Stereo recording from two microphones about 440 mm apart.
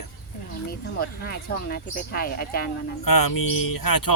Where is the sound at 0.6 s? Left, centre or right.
Left.